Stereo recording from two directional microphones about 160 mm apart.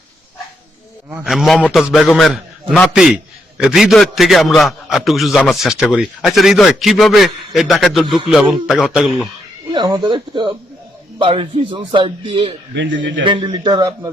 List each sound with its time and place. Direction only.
1.1 s a man's voice: 5° right (ahead or behind)
1.6 s a man's voice: 10° left (ahead or behind)
9.7 s a man's voice: 25° right (ahead or behind)
12.7 s a man's voice: 90° right
13.2 s a man's voice: 30° right (ahead or behind)